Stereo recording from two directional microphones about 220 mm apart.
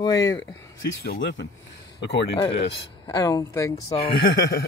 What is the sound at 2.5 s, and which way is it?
Speech, 50° left (ahead or behind).